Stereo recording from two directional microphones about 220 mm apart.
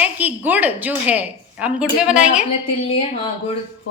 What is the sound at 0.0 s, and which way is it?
A woman's voice, 5° right (ahead or behind).